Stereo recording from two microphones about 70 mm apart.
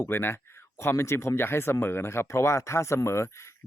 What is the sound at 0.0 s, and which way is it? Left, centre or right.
Speech, left.